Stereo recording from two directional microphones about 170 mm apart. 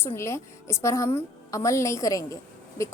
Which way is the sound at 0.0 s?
15° left (ahead or behind).